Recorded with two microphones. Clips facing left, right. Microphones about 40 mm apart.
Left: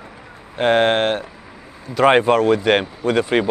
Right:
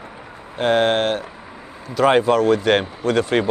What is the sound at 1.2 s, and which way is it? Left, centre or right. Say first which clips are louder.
Vehicle: right 2 dB; centre.